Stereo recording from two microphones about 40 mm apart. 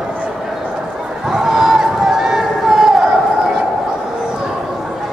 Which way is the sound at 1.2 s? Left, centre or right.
Centre.